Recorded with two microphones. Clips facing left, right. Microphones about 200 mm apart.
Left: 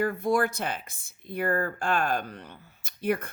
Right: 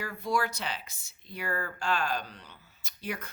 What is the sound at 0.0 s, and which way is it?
A woman's voice, 50° left (ahead or behind).